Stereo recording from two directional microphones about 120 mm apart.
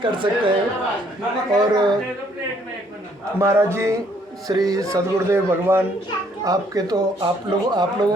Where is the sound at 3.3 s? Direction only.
25° right (ahead or behind).